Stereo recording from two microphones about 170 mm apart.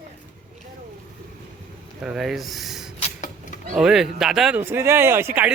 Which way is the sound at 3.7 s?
5° right (ahead or behind).